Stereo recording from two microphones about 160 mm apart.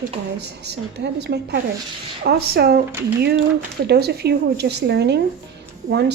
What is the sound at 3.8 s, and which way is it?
A woman's voice, 90° right.